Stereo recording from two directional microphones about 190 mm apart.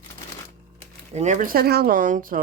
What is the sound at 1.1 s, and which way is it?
Speech, 35° right (ahead or behind).